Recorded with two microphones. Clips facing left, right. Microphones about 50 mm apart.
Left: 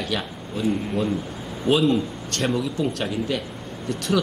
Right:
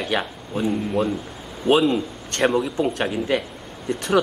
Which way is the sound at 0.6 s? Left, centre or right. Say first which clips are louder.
Right 1 dB; centre.